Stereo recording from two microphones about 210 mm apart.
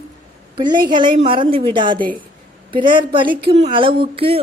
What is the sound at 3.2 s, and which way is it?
Speech, 50° right (ahead or behind).